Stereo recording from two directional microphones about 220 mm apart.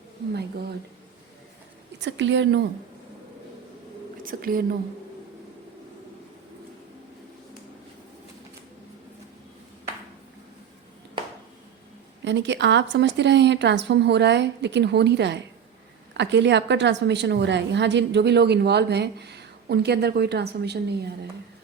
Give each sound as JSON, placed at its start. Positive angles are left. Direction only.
{"t": 2.0, "sound": "a woman's voice", "side_deg": -55}
{"t": 4.2, "sound": "speech", "side_deg": -40}
{"t": 12.2, "sound": "a woman's voice", "side_deg": -55}